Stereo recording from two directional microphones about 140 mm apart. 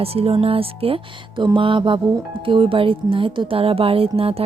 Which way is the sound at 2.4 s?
40° right (ahead or behind).